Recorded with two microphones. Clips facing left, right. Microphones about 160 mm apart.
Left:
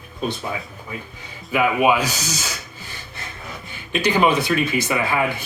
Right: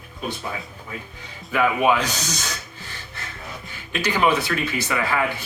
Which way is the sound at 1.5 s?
10° left (ahead or behind).